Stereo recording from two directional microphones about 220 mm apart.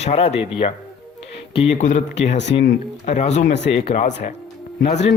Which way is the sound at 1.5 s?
30° left (ahead or behind).